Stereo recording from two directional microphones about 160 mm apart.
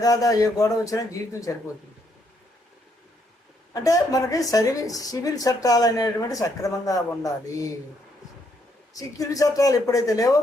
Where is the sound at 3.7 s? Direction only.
20° left (ahead or behind).